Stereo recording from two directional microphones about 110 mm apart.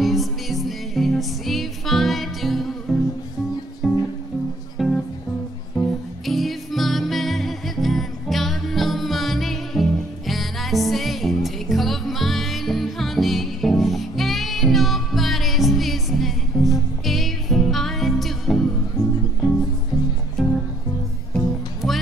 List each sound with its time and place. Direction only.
0.0 s music: centre (ahead or behind)
6.2 s music: centre (ahead or behind)
19.0 s music: 35° left (ahead or behind)
20.4 s music: centre (ahead or behind)